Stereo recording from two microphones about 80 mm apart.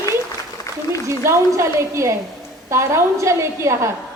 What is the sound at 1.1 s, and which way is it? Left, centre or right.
A woman's voice, right.